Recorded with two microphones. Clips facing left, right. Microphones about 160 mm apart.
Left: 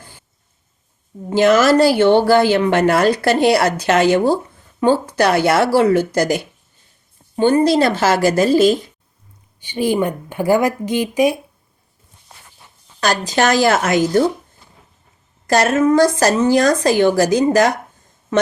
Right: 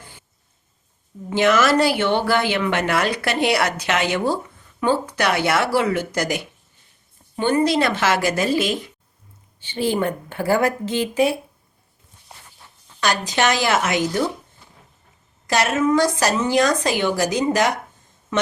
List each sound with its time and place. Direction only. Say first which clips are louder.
1.3 s speech: left 5 dB; 35° left (ahead or behind)
9.6 s speech: left 4 dB; 15° left (ahead or behind)
13.0 s speech: left 4 dB; 40° left (ahead or behind)
15.4 s speech: left 5 dB; 45° left (ahead or behind)